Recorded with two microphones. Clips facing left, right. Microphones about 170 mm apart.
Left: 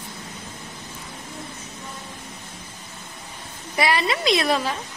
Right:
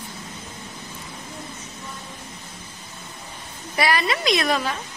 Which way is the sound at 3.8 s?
25° left (ahead or behind).